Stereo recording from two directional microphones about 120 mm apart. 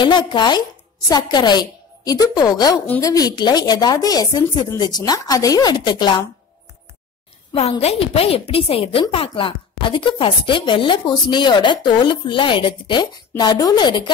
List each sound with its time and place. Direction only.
0.0 s a woman's voice: 40° left (ahead or behind)
7.8 s speech: 55° left (ahead or behind); by 14.1 s 40° left (ahead or behind)